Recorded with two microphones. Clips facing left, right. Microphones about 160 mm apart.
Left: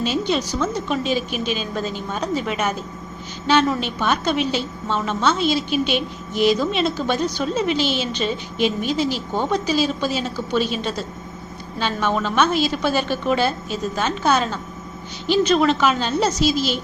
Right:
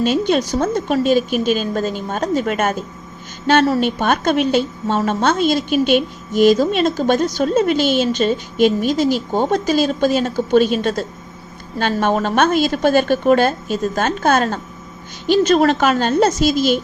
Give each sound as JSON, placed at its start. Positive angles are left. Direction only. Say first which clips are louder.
{"t": 0.0, "sound": "a woman's voice", "louder": "right 5 dB", "side_deg": -50}